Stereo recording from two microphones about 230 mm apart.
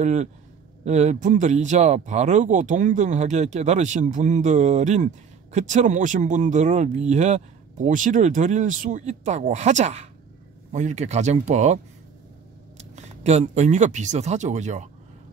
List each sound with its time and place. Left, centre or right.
0.0 s speech: right